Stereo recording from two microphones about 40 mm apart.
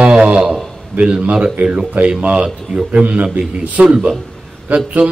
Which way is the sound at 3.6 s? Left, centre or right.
Right.